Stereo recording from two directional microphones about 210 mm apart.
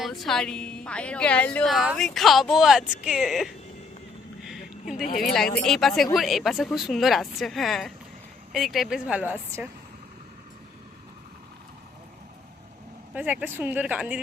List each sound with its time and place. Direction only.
0.0 s a woman's voice: centre (ahead or behind)
4.4 s a sound: centre (ahead or behind)
5.0 s speech: 40° left (ahead or behind)
5.6 s a woman's voice: centre (ahead or behind)
13.1 s speech: 10° right (ahead or behind)